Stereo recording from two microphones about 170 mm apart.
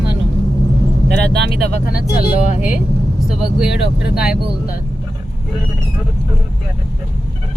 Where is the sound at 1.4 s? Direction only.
70° right (ahead or behind).